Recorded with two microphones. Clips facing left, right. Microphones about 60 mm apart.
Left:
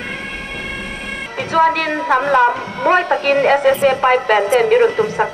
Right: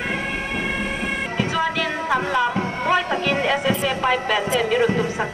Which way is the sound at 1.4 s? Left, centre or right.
Left.